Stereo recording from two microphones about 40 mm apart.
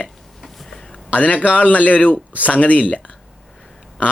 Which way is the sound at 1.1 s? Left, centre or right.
Left.